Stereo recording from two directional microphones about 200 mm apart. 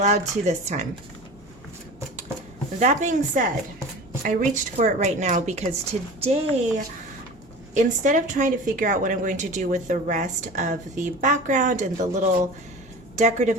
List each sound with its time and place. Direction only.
0.0 s a woman's voice: 35° right (ahead or behind)
2.7 s a woman's voice: 35° right (ahead or behind)